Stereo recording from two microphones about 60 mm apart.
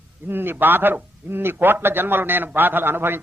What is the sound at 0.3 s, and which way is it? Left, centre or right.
A man's voice, right.